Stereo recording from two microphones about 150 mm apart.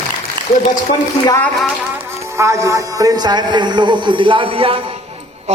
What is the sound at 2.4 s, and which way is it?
A man's voice, 20° right (ahead or behind).